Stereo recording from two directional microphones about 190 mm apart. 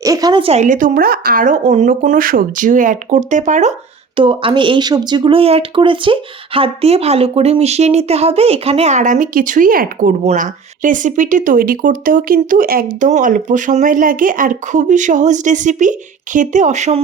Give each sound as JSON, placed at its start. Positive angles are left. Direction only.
{"t": 0.0, "sound": "a woman's voice", "side_deg": -20}
{"t": 0.6, "sound": "speech", "side_deg": -45}
{"t": 4.2, "sound": "speech", "side_deg": -25}